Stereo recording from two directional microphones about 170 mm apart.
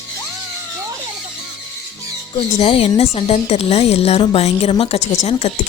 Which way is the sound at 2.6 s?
35° left (ahead or behind).